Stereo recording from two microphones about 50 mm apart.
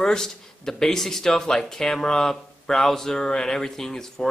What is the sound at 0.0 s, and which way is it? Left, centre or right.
Speech, centre.